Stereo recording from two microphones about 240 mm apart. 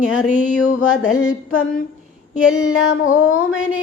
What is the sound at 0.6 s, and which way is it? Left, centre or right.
Mantra, left.